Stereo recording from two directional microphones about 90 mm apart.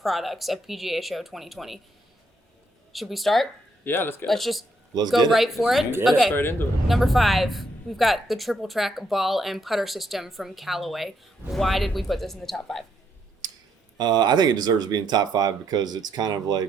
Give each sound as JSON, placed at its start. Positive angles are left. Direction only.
{"t": 0.0, "sound": "speech", "side_deg": 0}
{"t": 2.9, "sound": "speech", "side_deg": 0}
{"t": 3.8, "sound": "speech", "side_deg": 25}
{"t": 4.3, "sound": "speech", "side_deg": 0}
{"t": 6.3, "sound": "speech", "side_deg": 25}
{"t": 6.8, "sound": "speech", "side_deg": 0}
{"t": 14.0, "sound": "speech", "side_deg": -50}